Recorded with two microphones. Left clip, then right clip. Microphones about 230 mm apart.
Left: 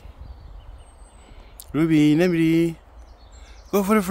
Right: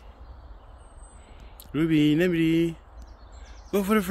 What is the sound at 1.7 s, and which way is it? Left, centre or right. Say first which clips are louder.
Mantra: left 4 dB; left.